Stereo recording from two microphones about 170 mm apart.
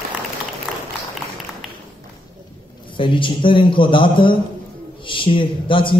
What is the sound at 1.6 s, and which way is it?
Tap, centre (ahead or behind).